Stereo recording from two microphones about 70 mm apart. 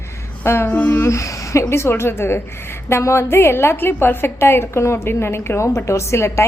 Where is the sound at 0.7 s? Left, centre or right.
Left.